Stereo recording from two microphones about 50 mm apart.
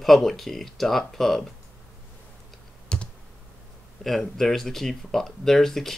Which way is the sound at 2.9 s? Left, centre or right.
Centre.